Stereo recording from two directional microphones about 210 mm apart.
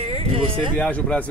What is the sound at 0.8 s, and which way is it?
Speech, 5° left (ahead or behind).